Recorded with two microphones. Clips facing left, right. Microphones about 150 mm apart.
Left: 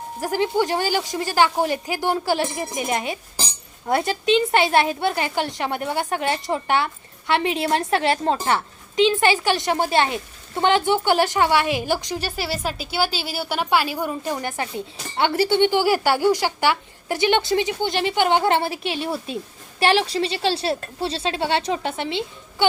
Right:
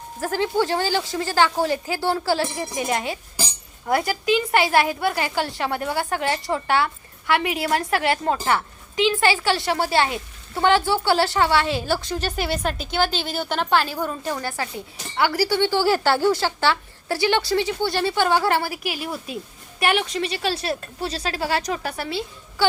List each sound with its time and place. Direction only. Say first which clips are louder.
0.2 s a woman's voice: left 1 dB; 15° left (ahead or behind)